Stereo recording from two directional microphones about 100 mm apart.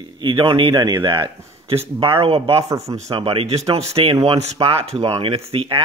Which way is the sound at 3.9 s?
75° right (ahead or behind).